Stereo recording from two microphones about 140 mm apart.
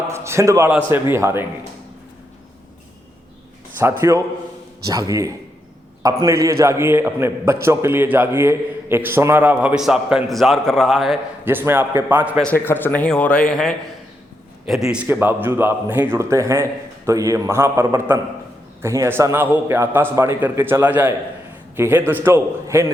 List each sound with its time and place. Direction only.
0.1 s a man's voice: 20° right (ahead or behind)
3.8 s a man's voice: 20° right (ahead or behind); by 11.2 s centre (ahead or behind)
11.4 s a man's voice: 15° right (ahead or behind)
12.5 s a man's voice: 15° left (ahead or behind); by 15.0 s 5° right (ahead or behind)
15.0 s a man's voice: 15° right (ahead or behind)